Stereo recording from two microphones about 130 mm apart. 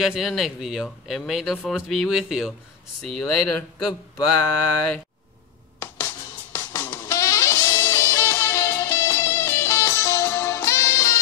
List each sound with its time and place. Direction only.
0.0 s speech: centre (ahead or behind)
4.5 s mantra: 10° left (ahead or behind)
6.5 s music: 20° left (ahead or behind)